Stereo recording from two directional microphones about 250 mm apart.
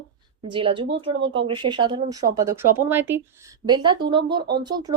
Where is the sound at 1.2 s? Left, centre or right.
Right.